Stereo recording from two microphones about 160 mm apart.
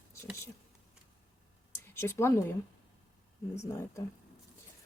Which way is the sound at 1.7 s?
15° left (ahead or behind).